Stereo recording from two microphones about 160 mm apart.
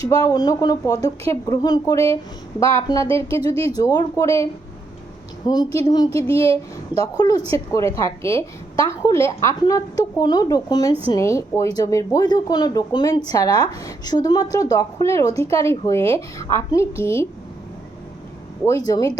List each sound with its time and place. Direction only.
0.0 s speech: 20° left (ahead or behind)
5.5 s speech: 25° left (ahead or behind)
6.2 s speech: 35° right (ahead or behind)
6.9 s a woman's voice: 20° left (ahead or behind)
18.6 s speech: 20° left (ahead or behind)